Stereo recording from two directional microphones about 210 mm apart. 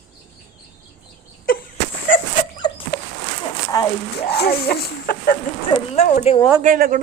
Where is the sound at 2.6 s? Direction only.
20° left (ahead or behind).